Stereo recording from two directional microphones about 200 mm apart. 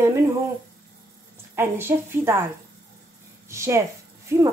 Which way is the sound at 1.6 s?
10° right (ahead or behind).